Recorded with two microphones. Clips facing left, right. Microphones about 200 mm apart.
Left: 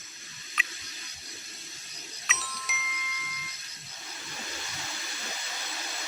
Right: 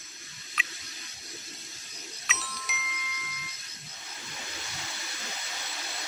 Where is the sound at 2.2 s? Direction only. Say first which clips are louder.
Even; centre (ahead or behind).